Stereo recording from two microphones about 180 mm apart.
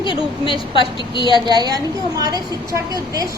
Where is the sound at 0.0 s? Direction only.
30° left (ahead or behind).